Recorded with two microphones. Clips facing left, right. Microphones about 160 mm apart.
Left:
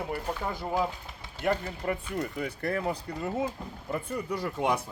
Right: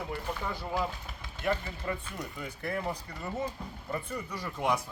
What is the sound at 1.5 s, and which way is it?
Speech, 55° left (ahead or behind).